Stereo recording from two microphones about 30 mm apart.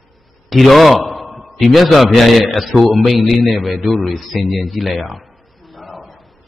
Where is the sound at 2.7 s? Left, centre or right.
Right.